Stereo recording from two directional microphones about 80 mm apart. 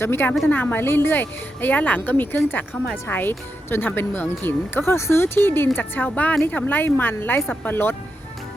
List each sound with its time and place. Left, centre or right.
0.0 s speech: left